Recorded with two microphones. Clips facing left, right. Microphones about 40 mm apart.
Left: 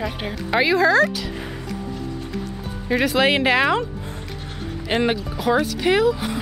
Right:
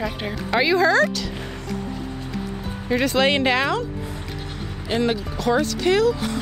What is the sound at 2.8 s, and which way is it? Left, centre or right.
Speech, centre.